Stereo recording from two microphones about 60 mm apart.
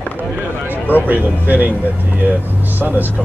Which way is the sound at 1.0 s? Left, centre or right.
Right.